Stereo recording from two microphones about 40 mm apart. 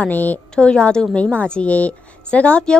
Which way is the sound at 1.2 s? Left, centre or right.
Left.